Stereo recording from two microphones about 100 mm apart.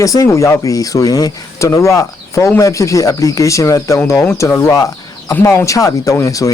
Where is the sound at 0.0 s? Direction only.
35° left (ahead or behind).